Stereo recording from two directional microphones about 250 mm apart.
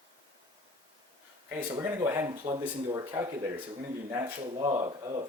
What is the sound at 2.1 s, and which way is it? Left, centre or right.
Speech, centre.